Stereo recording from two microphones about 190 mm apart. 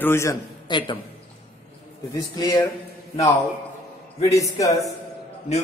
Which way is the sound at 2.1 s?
20° left (ahead or behind).